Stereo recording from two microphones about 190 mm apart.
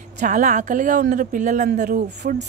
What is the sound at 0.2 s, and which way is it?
A woman's voice, 40° right (ahead or behind).